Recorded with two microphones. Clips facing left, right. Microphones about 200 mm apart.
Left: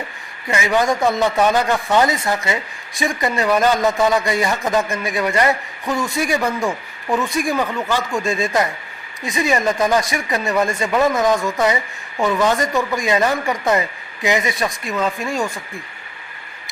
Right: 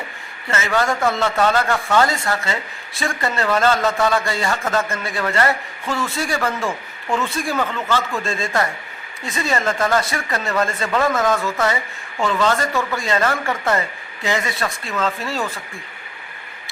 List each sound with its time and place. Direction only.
0.4 s a man's voice: 15° left (ahead or behind)